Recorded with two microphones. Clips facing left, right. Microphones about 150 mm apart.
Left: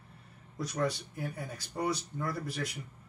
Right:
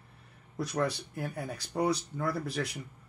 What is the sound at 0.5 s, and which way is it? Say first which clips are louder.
Speech: right 2 dB; 60° right (ahead or behind).